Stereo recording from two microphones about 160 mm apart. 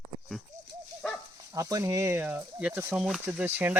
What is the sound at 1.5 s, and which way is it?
Speech, 20° right (ahead or behind).